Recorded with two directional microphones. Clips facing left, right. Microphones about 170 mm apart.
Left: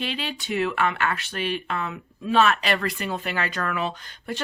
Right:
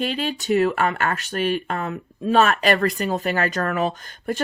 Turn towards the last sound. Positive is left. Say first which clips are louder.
# right 5 dB
turn(degrees=-45)  # may be behind; listen again after turning